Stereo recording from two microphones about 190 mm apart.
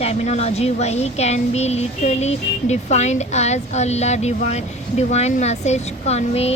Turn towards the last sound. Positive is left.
turn(degrees=35)  # may be behind; listen again after turning